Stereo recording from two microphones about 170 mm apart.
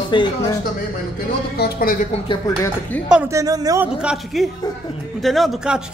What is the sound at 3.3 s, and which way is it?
Speech, 20° right (ahead or behind).